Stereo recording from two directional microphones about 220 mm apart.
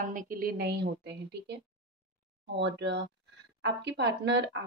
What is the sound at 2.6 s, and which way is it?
A woman's voice, 50° right (ahead or behind).